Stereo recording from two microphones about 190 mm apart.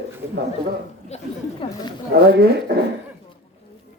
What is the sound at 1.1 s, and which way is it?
Speech, 35° left (ahead or behind).